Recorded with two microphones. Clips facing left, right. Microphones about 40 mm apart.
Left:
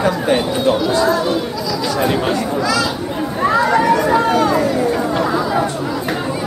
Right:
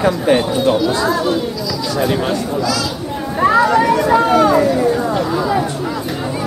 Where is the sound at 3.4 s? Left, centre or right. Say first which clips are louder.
Right 2 dB; centre.